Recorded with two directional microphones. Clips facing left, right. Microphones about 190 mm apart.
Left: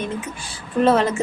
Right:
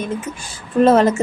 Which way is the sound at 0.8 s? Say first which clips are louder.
Right 4 dB; 45° right (ahead or behind).